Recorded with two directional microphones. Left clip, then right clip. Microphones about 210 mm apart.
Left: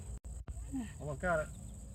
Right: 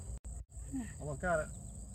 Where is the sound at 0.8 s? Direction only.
20° left (ahead or behind).